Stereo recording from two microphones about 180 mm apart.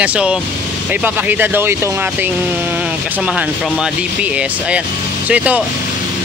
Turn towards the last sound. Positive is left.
turn(degrees=-5)  # may be behind; listen again after turning